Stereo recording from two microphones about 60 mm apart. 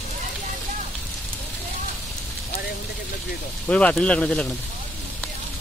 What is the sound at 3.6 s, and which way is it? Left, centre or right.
Speech, left.